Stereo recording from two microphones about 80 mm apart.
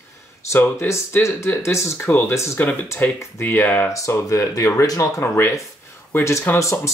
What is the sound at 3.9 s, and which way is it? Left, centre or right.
Speech, left.